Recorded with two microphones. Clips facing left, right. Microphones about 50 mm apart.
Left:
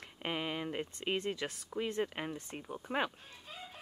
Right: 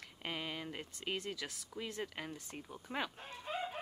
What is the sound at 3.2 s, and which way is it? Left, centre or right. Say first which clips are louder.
Chicken: right 8 dB; right.